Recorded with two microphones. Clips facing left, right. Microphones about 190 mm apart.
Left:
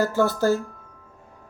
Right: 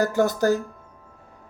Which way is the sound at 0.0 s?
15° right (ahead or behind).